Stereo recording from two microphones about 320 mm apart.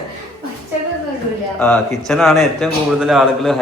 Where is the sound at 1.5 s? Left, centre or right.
Centre.